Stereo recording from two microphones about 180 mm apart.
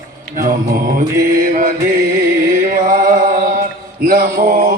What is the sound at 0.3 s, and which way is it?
Mantra, 55° right (ahead or behind).